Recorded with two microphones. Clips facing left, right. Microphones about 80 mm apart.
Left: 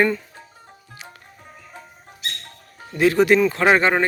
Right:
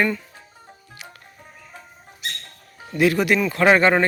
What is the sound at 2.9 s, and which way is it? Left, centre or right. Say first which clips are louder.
Speech: left 3 dB; left.